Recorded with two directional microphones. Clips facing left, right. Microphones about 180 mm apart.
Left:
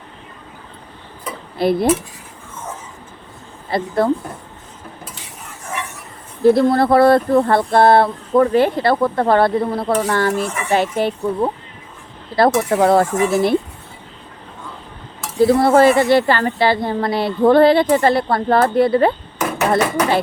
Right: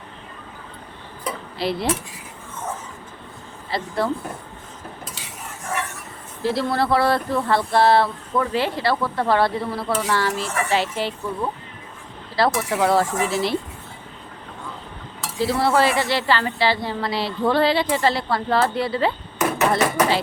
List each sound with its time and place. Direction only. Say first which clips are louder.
1.5 s speech: left 9 dB; 50° left (ahead or behind)
3.7 s speech: left 6 dB; 50° left (ahead or behind)
6.4 s speech: left 9 dB; 50° left (ahead or behind)
15.4 s speech: left 8 dB; 50° left (ahead or behind)